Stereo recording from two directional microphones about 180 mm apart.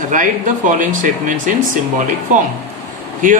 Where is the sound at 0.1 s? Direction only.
45° right (ahead or behind).